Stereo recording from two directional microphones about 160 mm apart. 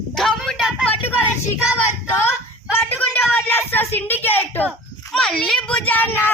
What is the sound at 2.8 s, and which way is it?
A woman's voice, 10° left (ahead or behind).